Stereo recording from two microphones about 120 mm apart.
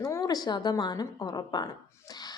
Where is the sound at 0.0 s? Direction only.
30° left (ahead or behind).